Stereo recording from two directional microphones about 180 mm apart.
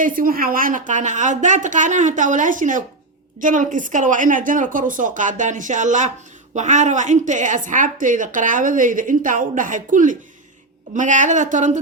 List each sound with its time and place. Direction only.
0.0 s a woman's voice: 50° right (ahead or behind)